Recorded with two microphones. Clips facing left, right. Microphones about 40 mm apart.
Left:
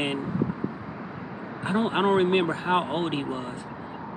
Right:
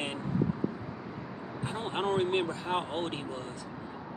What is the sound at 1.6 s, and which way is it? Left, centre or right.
Speech, left.